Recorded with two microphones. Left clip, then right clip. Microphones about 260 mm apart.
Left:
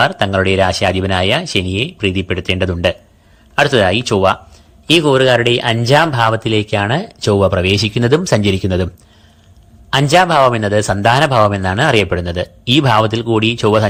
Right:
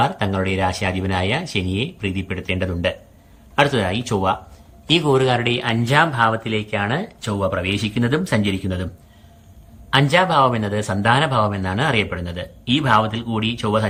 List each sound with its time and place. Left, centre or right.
0.0 s a man's voice: centre
9.9 s speech: centre